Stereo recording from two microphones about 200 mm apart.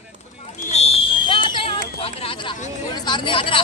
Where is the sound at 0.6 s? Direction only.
30° left (ahead or behind).